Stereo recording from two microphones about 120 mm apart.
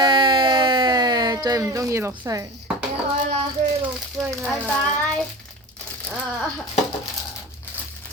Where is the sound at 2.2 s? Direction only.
30° right (ahead or behind).